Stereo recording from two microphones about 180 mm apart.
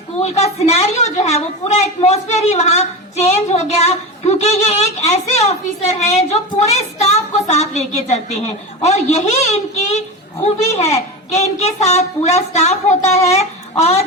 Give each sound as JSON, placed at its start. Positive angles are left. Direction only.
{"t": 0.2, "sound": "a woman's voice", "side_deg": 35}